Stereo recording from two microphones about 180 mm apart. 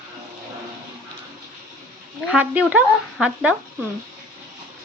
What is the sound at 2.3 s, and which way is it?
Speech, 5° right (ahead or behind).